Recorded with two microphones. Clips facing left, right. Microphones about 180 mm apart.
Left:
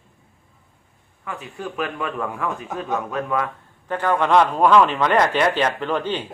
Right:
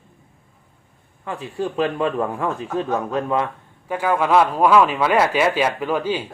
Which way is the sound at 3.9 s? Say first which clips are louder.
Even; 10° right (ahead or behind).